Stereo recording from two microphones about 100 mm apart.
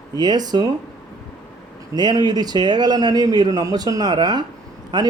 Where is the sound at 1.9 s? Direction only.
40° right (ahead or behind).